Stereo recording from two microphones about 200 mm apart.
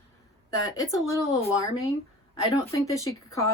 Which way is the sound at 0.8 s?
15° left (ahead or behind).